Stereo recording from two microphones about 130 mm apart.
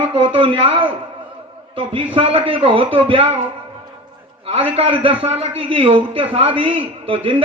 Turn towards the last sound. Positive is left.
turn(degrees=-45)  # may be behind; listen again after turning